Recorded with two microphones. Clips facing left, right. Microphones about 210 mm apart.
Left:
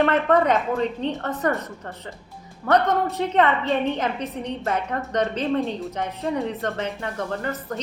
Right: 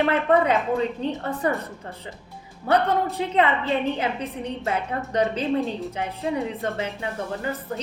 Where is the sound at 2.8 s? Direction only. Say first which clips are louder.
Left 1 dB; 30° right (ahead or behind).